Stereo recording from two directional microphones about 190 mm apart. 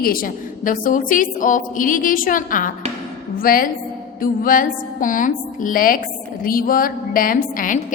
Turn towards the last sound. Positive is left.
turn(degrees=45)  # may be behind; listen again after turning